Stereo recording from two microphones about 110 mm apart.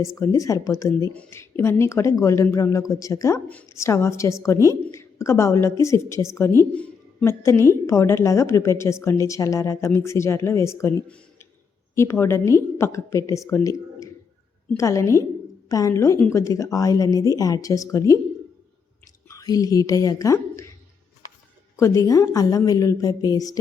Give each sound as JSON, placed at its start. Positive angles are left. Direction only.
{"t": 0.0, "sound": "a woman's voice", "side_deg": 30}
{"t": 1.1, "sound": "speech", "side_deg": 10}
{"t": 1.4, "sound": "a woman's voice", "side_deg": 25}
{"t": 11.9, "sound": "a woman's voice", "side_deg": 25}
{"t": 19.3, "sound": "a woman's voice", "side_deg": 30}
{"t": 21.8, "sound": "speech", "side_deg": 30}